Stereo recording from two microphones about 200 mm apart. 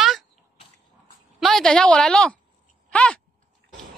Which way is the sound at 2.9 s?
5° left (ahead or behind).